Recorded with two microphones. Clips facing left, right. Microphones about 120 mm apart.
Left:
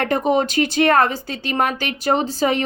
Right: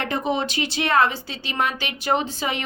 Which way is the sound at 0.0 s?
45° left (ahead or behind).